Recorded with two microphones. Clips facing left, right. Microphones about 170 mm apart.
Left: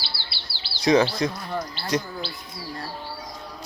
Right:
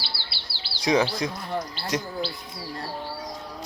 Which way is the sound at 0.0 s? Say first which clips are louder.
Even; 50° right (ahead or behind).